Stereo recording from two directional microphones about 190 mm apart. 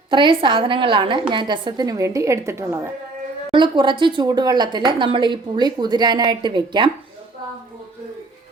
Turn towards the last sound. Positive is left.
turn(degrees=-25)  # may be behind; listen again after turning